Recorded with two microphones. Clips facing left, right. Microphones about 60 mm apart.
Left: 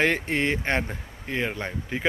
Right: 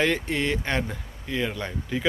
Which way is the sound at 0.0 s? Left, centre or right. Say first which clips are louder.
Left 1 dB; left.